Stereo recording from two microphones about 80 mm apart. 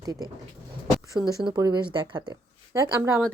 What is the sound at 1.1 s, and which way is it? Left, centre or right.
Speech, right.